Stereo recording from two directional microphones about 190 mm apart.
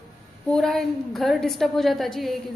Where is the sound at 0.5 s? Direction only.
Centre (ahead or behind).